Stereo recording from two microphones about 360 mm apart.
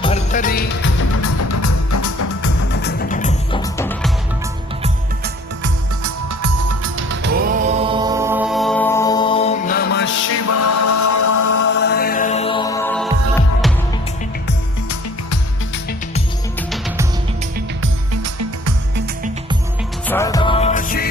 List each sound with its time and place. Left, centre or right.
0.0 s music: centre
1.1 s music: left
2.8 s music: left
3.6 s music: centre
4.8 s music: right
6.0 s music: right; by 11.6 s left
11.6 s music: left; by 13.1 s centre
18.1 s music: right
20.1 s music: centre; by 21.1 s left